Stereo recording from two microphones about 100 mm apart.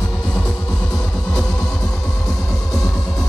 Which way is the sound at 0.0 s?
10° left (ahead or behind).